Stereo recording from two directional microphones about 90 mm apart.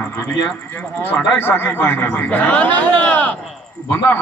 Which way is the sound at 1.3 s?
25° left (ahead or behind).